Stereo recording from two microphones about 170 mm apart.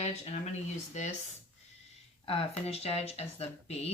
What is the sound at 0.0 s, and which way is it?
Speech, 40° left (ahead or behind).